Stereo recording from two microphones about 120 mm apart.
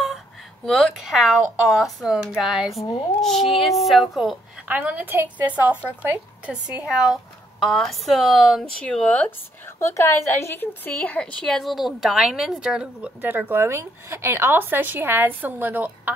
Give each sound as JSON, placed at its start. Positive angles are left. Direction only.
{"t": 0.7, "sound": "a child's voice", "side_deg": 0}
{"t": 4.6, "sound": "a woman's voice", "side_deg": -15}
{"t": 9.7, "sound": "a woman's voice", "side_deg": 25}
{"t": 10.9, "sound": "a woman's voice", "side_deg": 5}